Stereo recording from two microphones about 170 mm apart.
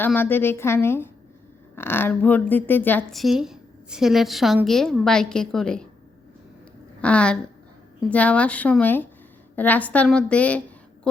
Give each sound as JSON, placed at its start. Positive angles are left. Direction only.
{"t": 0.0, "sound": "speech", "side_deg": 10}
{"t": 3.2, "sound": "a woman's voice", "side_deg": 0}
{"t": 7.0, "sound": "speech", "side_deg": 5}
{"t": 11.1, "sound": "a sound", "side_deg": 5}